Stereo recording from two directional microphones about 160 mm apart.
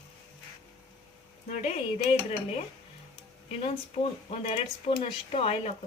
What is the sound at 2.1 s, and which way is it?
Speech, 40° left (ahead or behind).